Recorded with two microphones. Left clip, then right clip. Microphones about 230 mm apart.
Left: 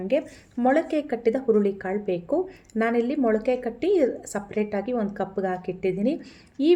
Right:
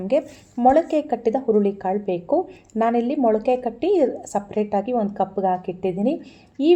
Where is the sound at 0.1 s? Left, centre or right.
Centre.